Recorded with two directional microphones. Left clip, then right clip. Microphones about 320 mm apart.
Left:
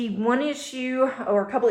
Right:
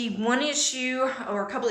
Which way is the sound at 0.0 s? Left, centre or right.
Centre.